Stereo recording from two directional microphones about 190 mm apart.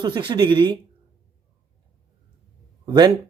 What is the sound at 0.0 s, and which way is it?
Speech, 25° right (ahead or behind).